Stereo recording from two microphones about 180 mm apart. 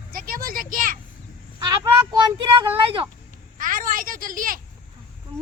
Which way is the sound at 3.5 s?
50° right (ahead or behind).